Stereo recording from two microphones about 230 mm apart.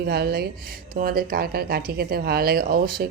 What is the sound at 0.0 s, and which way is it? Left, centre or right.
Speech, right.